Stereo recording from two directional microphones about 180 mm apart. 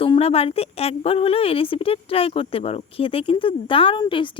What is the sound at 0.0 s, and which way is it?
A woman's voice, 30° left (ahead or behind).